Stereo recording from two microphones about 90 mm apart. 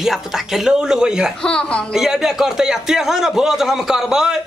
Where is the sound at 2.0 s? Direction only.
5° right (ahead or behind).